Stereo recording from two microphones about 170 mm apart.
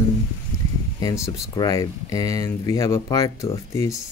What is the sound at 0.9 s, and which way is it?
Speech, 20° left (ahead or behind).